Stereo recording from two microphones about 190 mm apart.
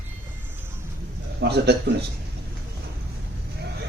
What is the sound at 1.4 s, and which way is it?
Speech, 60° right (ahead or behind).